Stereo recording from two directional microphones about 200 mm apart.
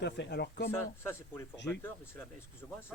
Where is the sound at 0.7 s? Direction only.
10° left (ahead or behind).